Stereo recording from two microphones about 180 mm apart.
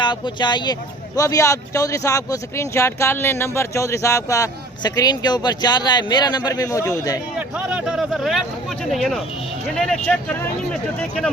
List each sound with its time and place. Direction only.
0.0 s speech: 25° left (ahead or behind)
7.3 s a man's voice: 10° right (ahead or behind)